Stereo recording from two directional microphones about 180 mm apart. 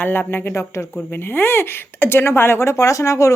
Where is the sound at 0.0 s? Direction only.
10° left (ahead or behind).